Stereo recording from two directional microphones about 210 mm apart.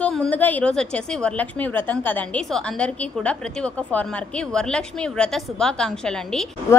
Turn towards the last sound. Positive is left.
turn(degrees=15)  # may be behind; listen again after turning